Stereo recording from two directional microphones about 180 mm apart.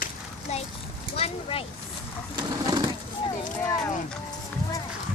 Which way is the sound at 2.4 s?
25° right (ahead or behind).